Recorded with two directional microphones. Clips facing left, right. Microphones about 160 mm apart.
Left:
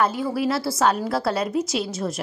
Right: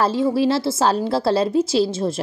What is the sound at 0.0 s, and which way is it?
A woman's voice, 25° right (ahead or behind).